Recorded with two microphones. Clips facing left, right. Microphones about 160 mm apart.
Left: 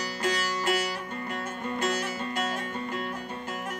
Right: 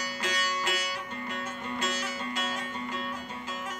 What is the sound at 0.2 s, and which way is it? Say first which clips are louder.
Music: left 4 dB; 50° left (ahead or behind).